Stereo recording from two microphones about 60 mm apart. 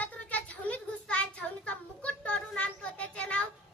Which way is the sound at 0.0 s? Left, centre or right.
Left.